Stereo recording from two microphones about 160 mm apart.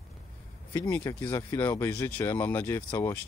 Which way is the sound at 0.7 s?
15° left (ahead or behind).